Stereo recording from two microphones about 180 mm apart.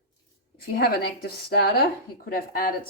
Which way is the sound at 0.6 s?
60° left (ahead or behind).